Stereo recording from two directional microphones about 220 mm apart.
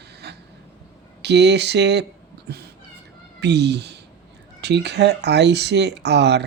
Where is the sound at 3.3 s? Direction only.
50° right (ahead or behind).